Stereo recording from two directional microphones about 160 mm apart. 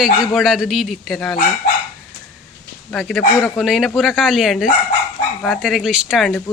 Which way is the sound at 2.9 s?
Centre (ahead or behind).